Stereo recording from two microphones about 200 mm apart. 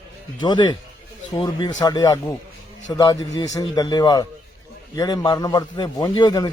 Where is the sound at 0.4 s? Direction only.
20° left (ahead or behind).